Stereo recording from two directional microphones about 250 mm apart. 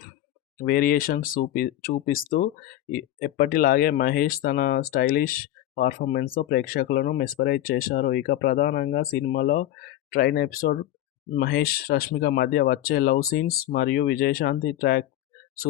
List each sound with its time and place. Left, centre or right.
0.6 s speech: left